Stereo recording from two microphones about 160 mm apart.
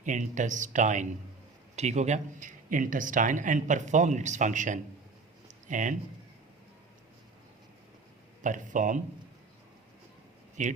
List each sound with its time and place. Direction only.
0.0 s speech: 50° right (ahead or behind)
5.5 s a sound: 50° right (ahead or behind)
8.4 s speech: 55° right (ahead or behind)
10.6 s speech: 50° right (ahead or behind)